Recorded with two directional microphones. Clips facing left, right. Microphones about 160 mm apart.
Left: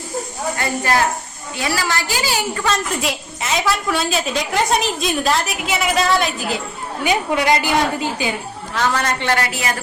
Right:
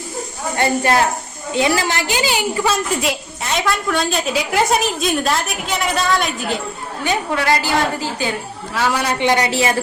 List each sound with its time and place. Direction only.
0.5 s a woman's voice: 25° right (ahead or behind)
2.6 s a woman's voice: 5° right (ahead or behind)
7.0 s a woman's voice: 15° left (ahead or behind)
8.7 s speech: 10° right (ahead or behind)
9.5 s a woman's voice: 30° right (ahead or behind)